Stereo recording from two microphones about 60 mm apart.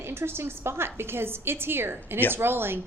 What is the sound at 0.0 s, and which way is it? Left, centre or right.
A woman's voice, right.